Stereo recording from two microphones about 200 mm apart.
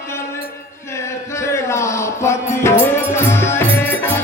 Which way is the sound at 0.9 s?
15° left (ahead or behind).